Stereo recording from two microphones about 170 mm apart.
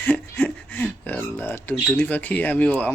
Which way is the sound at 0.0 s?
10° left (ahead or behind).